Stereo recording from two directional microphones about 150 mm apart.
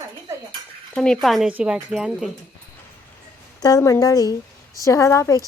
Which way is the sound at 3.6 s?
25° left (ahead or behind).